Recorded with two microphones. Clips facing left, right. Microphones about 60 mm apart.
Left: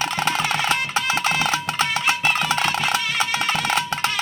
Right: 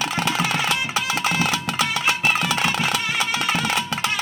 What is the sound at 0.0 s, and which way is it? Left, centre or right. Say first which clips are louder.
Percussion: even; left.